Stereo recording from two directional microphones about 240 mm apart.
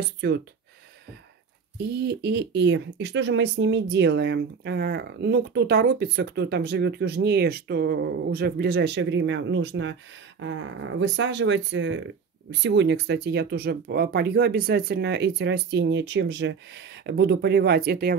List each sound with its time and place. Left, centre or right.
0.2 s speech: right
1.8 s speech: right